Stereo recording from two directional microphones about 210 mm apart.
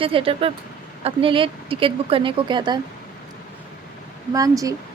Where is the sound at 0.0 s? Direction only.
25° right (ahead or behind).